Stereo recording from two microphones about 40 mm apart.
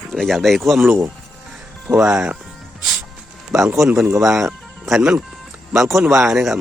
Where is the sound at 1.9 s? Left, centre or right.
Right.